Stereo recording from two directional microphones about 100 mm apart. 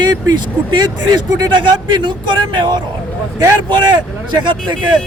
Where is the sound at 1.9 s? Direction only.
50° right (ahead or behind).